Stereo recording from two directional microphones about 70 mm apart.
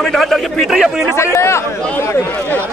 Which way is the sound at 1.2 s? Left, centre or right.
Left.